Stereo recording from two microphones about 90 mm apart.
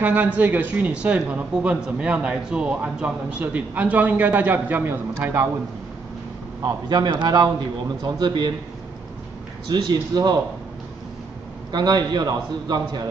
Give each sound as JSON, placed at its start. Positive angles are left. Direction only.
{"t": 0.0, "sound": "speech", "side_deg": -20}
{"t": 6.6, "sound": "a man's voice", "side_deg": -50}
{"t": 9.7, "sound": "a man's voice", "side_deg": -50}
{"t": 11.7, "sound": "a man's voice", "side_deg": -55}